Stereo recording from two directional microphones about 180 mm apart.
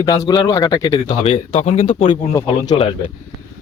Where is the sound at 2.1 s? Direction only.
20° left (ahead or behind).